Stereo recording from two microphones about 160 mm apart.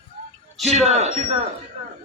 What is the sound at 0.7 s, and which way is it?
Speech, 45° right (ahead or behind).